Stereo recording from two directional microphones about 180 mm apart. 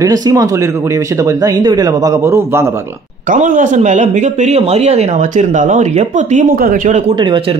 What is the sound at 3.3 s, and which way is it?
A man's voice, 45° right (ahead or behind).